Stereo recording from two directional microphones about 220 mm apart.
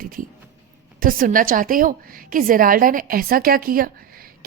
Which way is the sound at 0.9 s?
40° right (ahead or behind).